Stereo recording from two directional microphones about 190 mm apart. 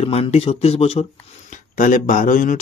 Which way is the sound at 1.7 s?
45° left (ahead or behind).